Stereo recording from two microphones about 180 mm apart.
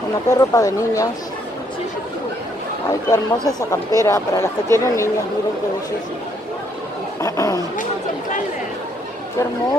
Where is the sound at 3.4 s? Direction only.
20° left (ahead or behind).